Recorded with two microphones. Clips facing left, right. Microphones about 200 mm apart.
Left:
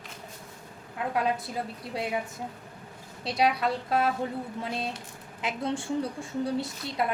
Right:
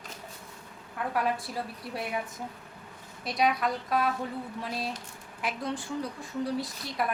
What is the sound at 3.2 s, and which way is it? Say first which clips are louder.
A woman's voice: left 1 dB; 30° left (ahead or behind).